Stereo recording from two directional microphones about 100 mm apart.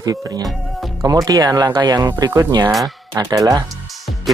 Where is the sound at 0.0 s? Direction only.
40° right (ahead or behind).